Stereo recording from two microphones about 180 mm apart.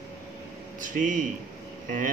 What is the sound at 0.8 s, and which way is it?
Speech, 45° right (ahead or behind).